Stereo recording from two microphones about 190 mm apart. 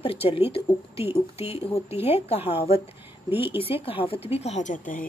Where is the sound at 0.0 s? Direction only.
30° left (ahead or behind).